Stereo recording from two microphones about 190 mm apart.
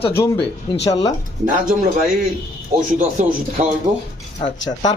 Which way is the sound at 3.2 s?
40° right (ahead or behind).